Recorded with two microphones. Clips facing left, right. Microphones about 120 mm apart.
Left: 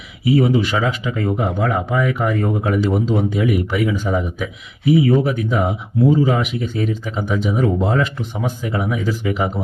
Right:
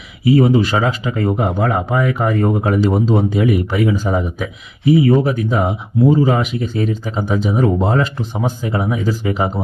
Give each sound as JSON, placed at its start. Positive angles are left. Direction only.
{"t": 0.3, "sound": "speech", "side_deg": -40}